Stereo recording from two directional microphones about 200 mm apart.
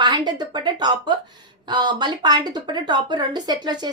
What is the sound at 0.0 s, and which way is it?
Speech, 20° right (ahead or behind).